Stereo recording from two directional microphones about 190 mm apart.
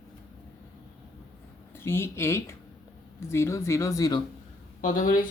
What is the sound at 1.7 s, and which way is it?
Speech, 15° left (ahead or behind).